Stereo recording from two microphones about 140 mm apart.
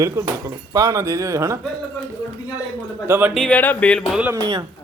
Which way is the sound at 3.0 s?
15° right (ahead or behind).